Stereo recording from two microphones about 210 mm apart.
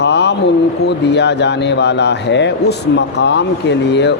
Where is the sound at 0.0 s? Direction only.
55° left (ahead or behind).